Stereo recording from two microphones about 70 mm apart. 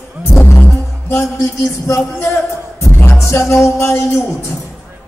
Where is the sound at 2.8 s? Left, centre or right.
Left.